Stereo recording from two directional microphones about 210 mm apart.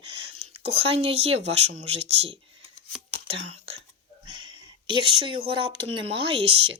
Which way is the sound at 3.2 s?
30° right (ahead or behind).